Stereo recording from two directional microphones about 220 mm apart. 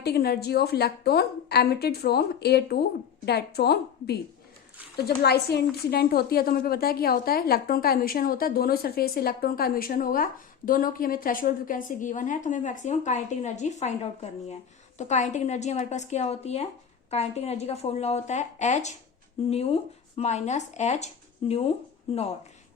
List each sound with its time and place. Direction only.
0.0 s a woman's voice: 45° left (ahead or behind); by 21.7 s 30° left (ahead or behind)